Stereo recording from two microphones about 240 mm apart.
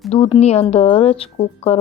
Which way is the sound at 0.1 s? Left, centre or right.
Left.